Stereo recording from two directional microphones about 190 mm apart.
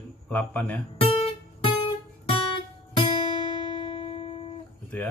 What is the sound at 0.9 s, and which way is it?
Music, 30° left (ahead or behind).